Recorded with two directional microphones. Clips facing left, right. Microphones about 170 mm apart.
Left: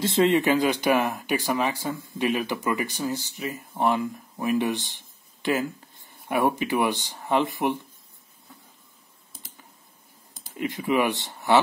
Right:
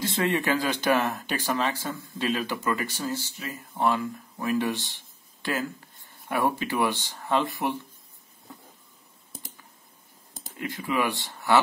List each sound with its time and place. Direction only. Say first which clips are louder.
0.0 s speech: left 6 dB; 20° left (ahead or behind)
10.6 s speech: left 4 dB; 20° left (ahead or behind)